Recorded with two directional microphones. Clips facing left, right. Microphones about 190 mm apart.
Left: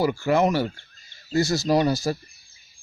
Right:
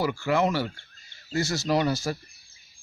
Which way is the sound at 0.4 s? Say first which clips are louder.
Left 3 dB; 15° left (ahead or behind).